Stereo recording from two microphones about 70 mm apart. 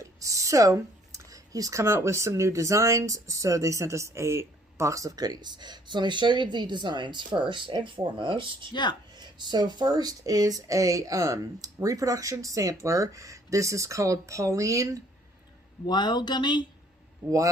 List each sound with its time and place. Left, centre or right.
0.0 s a sound: right
1.8 s speech: right
5.1 s speech: right
8.7 s speech: left
9.1 s speech: right
15.9 s speech: left